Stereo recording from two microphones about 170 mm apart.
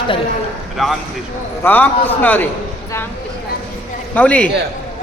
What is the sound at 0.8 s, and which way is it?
Speech, centre (ahead or behind).